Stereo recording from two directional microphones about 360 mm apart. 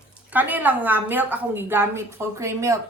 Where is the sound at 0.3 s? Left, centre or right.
Centre.